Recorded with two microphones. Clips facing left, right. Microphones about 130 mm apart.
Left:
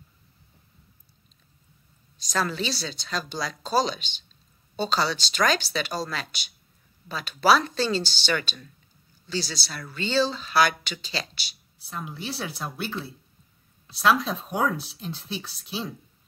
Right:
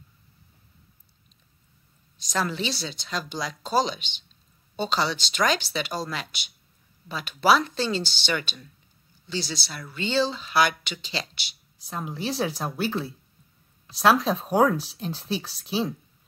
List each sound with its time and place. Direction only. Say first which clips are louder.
2.1 s speech: even; 20° right (ahead or behind)
11.9 s a woman's voice: right 4 dB; 35° right (ahead or behind)